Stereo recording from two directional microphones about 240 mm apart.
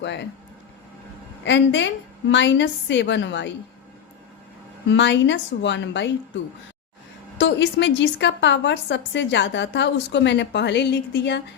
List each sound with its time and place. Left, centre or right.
0.0 s a woman's voice: left
1.5 s a woman's voice: left
4.9 s a woman's voice: left
7.3 s a woman's voice: left